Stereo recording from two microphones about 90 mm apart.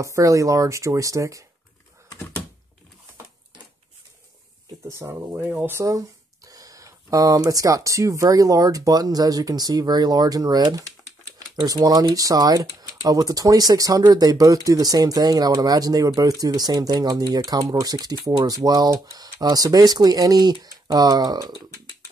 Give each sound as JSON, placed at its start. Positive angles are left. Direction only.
{"t": 0.0, "sound": "speech", "side_deg": -35}
{"t": 4.8, "sound": "speech", "side_deg": -30}